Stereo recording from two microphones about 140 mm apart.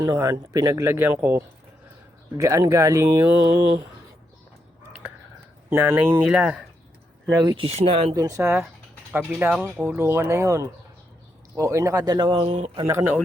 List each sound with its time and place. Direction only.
0.0 s speech: 25° right (ahead or behind)
5.7 s speech: 15° right (ahead or behind)
7.3 s speech: 30° right (ahead or behind)
7.6 s speech: 45° right (ahead or behind)
8.1 s speech: 25° right (ahead or behind)
12.5 s speech: 55° right (ahead or behind)
12.8 s speech: 20° right (ahead or behind)